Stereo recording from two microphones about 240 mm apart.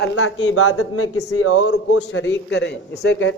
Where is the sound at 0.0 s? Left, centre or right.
Left.